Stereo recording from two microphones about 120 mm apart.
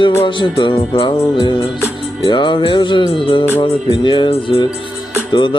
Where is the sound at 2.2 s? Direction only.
40° left (ahead or behind).